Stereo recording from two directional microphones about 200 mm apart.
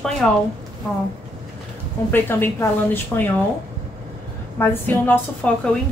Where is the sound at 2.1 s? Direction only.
10° left (ahead or behind).